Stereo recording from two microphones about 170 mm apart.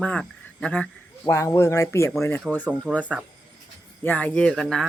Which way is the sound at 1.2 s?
20° left (ahead or behind).